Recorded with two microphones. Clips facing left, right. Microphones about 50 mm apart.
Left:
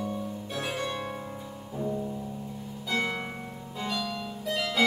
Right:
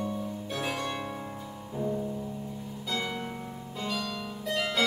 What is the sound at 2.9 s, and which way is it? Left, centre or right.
Music, left.